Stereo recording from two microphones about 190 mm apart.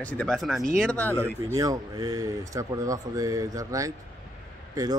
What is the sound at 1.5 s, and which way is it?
Speech, 20° right (ahead or behind).